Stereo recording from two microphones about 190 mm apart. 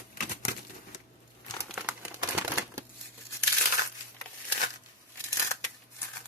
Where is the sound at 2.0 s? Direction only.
10° right (ahead or behind).